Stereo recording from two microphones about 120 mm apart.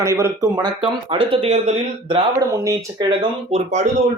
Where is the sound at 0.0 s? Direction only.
25° right (ahead or behind).